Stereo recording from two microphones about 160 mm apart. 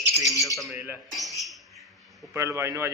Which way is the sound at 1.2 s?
Centre (ahead or behind).